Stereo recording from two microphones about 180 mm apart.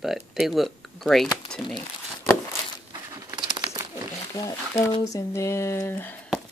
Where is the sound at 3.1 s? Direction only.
25° right (ahead or behind).